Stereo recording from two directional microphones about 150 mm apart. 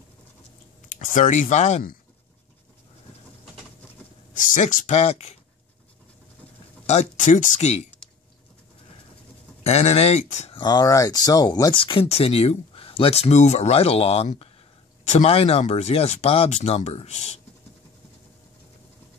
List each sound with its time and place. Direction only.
0.8 s speech: 60° left (ahead or behind)
4.3 s speech: 60° left (ahead or behind); by 5.4 s 45° left (ahead or behind)
6.9 s speech: 50° left (ahead or behind)
9.6 s speech: 45° left (ahead or behind)
10.6 s speech: 25° left (ahead or behind); by 17.4 s 50° left (ahead or behind)